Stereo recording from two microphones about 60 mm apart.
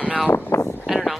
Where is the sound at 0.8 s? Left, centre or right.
Centre.